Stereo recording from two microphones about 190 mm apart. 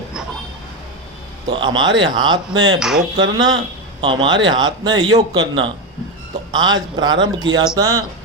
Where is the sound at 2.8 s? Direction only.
5° right (ahead or behind).